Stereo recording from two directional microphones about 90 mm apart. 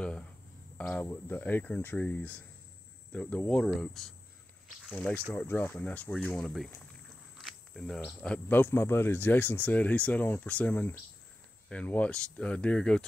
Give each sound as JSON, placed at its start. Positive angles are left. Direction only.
{"t": 0.7, "sound": "speech", "side_deg": 15}
{"t": 1.0, "sound": "speech", "side_deg": 25}
{"t": 4.9, "sound": "speech", "side_deg": 15}